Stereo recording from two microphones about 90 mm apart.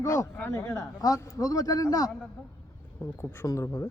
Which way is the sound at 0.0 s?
35° left (ahead or behind).